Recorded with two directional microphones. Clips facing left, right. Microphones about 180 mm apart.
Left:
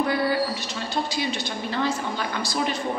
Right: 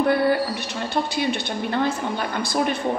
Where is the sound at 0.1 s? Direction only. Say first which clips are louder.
Right 4 dB; 55° right (ahead or behind).